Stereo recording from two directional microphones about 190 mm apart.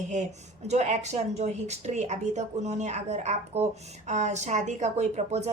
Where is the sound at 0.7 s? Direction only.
35° right (ahead or behind).